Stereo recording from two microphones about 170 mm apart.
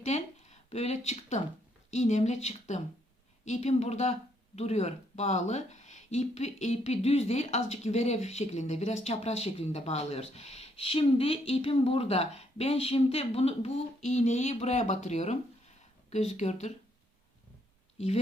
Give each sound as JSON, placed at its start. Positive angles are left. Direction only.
{"t": 0.0, "sound": "a sound", "side_deg": 40}
{"t": 1.9, "sound": "speech", "side_deg": 45}
{"t": 17.9, "sound": "speech", "side_deg": 40}